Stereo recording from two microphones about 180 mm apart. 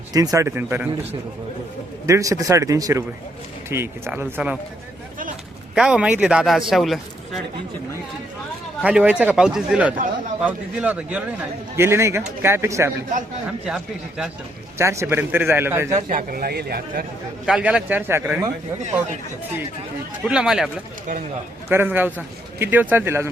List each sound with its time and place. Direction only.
0.1 s a man's voice: 20° right (ahead or behind)
2.0 s a man's voice: 15° right (ahead or behind)
5.7 s speech: 5° right (ahead or behind)
8.8 s a man's voice: 5° right (ahead or behind)
13.7 s speech: 5° right (ahead or behind)
14.8 s a man's voice: 15° right (ahead or behind)
16.0 s a man's voice: 50° right (ahead or behind)
17.4 s a man's voice: 5° right (ahead or behind)
20.2 s speech: 5° right (ahead or behind)
21.7 s a man's voice: 10° right (ahead or behind)